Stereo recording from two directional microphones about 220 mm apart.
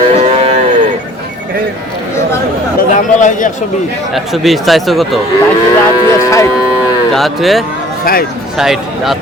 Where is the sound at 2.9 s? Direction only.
35° left (ahead or behind).